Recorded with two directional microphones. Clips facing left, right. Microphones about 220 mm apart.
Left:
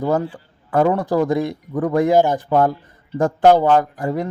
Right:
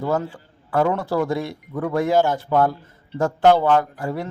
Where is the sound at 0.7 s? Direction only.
20° left (ahead or behind).